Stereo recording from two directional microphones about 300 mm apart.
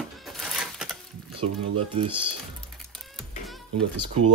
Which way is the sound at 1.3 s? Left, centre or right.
Centre.